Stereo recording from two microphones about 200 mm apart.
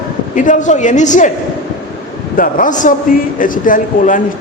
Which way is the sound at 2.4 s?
40° left (ahead or behind).